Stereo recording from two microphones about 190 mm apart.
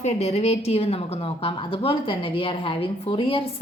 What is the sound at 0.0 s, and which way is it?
A woman's voice, 35° left (ahead or behind).